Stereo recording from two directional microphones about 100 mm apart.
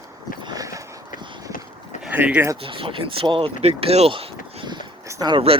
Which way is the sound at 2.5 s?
60° right (ahead or behind).